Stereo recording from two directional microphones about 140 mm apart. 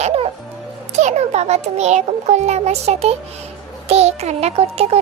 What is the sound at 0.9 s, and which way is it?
A child's voice, 55° right (ahead or behind).